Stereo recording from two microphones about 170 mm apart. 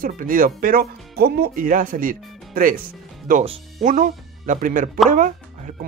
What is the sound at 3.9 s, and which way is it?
Speech, 50° right (ahead or behind).